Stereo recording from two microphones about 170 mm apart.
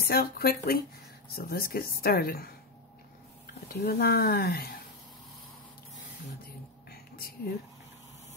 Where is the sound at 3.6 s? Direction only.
65° left (ahead or behind).